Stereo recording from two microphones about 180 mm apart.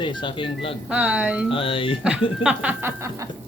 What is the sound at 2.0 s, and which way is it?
Speech, 5° right (ahead or behind).